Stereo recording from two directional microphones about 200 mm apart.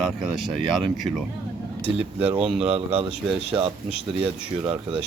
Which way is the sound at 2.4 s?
25° right (ahead or behind).